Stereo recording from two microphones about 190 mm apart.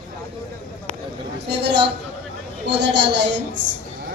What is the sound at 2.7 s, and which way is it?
Speech, 70° right (ahead or behind).